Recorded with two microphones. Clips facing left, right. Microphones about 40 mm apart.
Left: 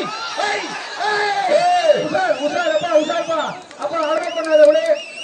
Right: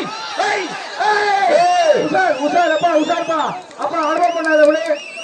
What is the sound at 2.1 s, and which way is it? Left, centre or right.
A man's voice, right.